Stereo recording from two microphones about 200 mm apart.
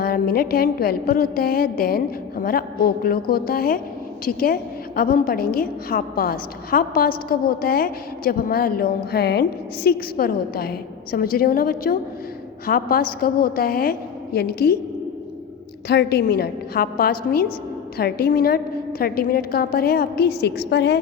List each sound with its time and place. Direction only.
0.0 s a woman's voice: 50° left (ahead or behind)
15.9 s a woman's voice: 55° left (ahead or behind)